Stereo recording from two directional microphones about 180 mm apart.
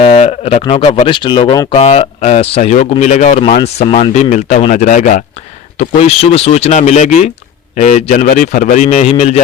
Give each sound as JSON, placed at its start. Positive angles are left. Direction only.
{"t": 0.0, "sound": "a man's voice", "side_deg": 40}